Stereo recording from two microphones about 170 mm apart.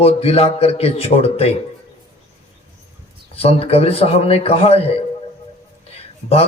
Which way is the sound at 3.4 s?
35° left (ahead or behind).